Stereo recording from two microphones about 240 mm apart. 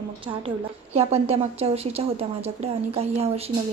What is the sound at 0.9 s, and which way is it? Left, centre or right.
A woman's voice, right.